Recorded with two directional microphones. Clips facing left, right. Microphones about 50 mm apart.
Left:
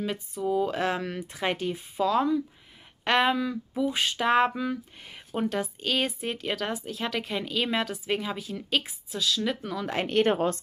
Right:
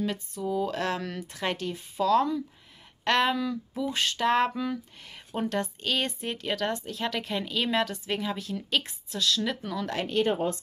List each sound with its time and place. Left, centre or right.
0.0 s speech: centre
10.0 s a woman's voice: left